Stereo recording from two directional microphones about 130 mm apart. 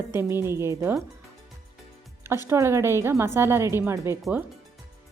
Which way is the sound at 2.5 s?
20° right (ahead or behind).